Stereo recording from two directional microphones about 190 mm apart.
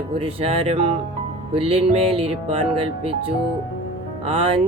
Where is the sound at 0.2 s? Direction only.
30° right (ahead or behind).